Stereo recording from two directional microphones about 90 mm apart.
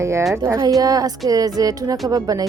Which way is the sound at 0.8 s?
45° right (ahead or behind).